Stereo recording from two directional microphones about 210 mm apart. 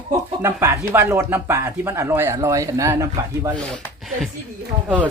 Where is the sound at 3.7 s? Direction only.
5° left (ahead or behind).